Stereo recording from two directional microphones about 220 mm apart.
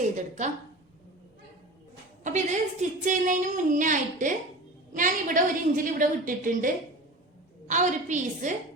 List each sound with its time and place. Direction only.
0.0 s a woman's voice: 35° right (ahead or behind)
2.2 s a woman's voice: 35° right (ahead or behind)
7.7 s a woman's voice: 35° right (ahead or behind)